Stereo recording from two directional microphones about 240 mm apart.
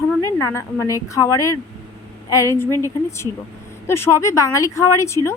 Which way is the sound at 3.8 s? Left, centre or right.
Centre.